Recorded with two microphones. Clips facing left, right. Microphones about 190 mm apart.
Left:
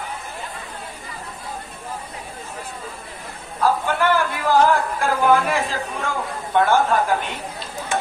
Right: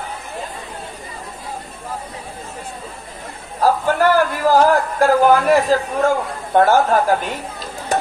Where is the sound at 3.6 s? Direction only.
40° right (ahead or behind).